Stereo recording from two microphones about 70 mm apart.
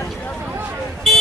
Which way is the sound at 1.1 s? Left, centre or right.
Centre.